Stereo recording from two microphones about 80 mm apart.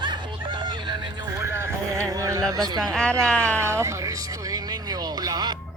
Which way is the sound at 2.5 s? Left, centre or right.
Right.